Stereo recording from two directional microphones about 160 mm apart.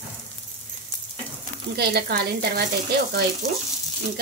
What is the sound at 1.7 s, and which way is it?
Speech, 80° right.